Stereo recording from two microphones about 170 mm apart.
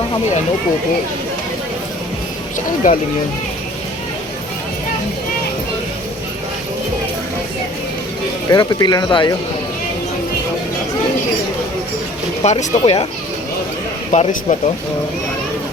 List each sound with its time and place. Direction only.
2.8 s speech: 55° left (ahead or behind)
8.4 s speech: 25° left (ahead or behind)
12.4 s speech: 40° left (ahead or behind)
14.1 s speech: 50° left (ahead or behind)